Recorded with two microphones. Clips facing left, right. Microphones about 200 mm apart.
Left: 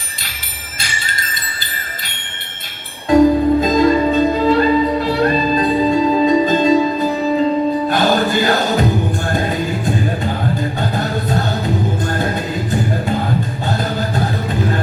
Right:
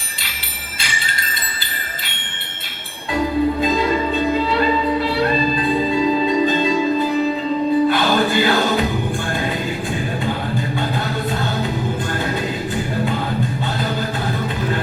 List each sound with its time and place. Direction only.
3.1 s music: 45° left (ahead or behind)
10.8 s music: 45° left (ahead or behind)